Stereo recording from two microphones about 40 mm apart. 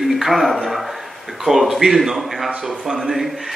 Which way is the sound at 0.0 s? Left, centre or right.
Centre.